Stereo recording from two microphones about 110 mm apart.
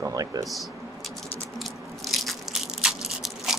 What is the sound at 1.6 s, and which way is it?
Biting, centre (ahead or behind).